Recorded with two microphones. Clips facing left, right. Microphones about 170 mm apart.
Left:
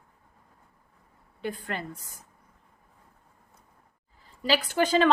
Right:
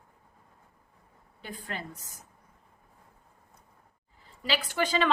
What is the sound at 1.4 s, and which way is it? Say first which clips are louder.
Speech: left 6 dB; 60° left (ahead or behind).